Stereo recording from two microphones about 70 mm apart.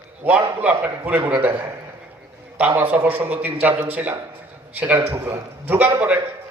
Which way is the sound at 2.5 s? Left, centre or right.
Right.